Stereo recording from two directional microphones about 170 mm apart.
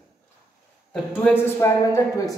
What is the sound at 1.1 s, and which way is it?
Speech, 10° left (ahead or behind).